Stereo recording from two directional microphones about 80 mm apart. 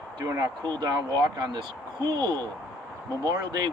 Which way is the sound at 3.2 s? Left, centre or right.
Right.